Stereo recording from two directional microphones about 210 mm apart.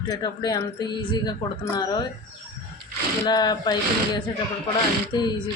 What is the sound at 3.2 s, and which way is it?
Speech, 20° left (ahead or behind).